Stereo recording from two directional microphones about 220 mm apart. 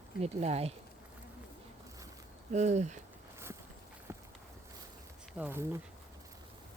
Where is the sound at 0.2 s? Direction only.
30° right (ahead or behind).